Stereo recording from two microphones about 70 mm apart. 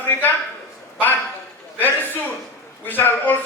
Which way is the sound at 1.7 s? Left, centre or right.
Left.